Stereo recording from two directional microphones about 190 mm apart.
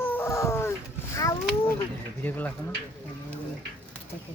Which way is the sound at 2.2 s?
10° left (ahead or behind).